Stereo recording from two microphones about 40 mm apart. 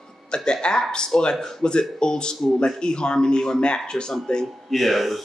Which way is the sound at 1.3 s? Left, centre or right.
Centre.